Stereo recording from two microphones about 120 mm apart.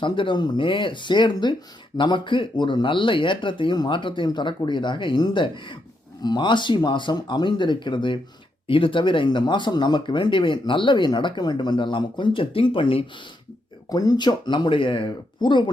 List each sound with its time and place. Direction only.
0.0 s speech: 40° left (ahead or behind)
13.9 s speech: 35° left (ahead or behind)